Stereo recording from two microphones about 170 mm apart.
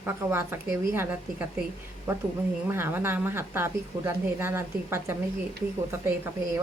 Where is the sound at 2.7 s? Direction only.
15° right (ahead or behind).